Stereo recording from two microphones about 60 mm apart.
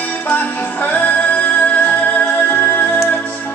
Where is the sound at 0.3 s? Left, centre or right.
Left.